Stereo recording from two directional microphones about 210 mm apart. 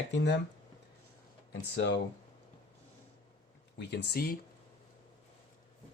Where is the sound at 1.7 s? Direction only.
55° left (ahead or behind).